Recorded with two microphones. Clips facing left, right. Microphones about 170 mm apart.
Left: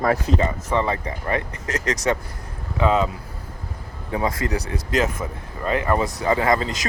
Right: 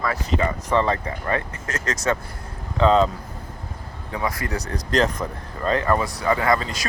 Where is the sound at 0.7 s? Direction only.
15° left (ahead or behind).